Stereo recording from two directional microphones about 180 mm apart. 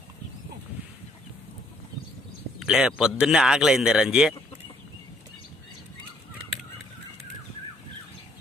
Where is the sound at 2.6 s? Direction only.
5° right (ahead or behind).